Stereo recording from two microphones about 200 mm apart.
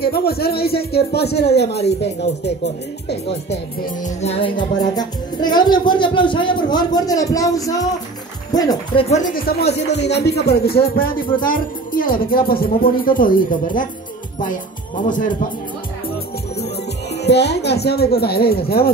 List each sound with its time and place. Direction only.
0.0 s speech: 50° left (ahead or behind)
4.0 s speech: 30° left (ahead or behind)
9.1 s speech: 40° left (ahead or behind)
14.4 s music: 40° left (ahead or behind)
17.2 s speech: 55° left (ahead or behind)